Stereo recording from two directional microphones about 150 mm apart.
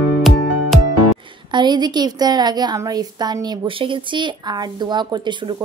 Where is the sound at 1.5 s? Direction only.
30° right (ahead or behind).